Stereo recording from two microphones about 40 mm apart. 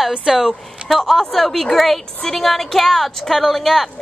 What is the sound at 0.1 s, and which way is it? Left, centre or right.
Speech, centre.